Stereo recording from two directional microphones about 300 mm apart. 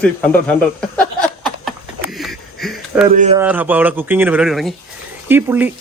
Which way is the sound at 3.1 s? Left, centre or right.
Right.